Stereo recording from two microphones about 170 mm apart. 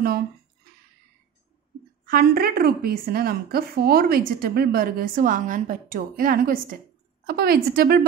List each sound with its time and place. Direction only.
2.0 s a woman's voice: 60° right (ahead or behind)